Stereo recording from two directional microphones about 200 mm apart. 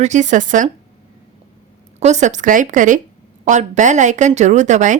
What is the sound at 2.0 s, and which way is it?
Speech, 35° right (ahead or behind).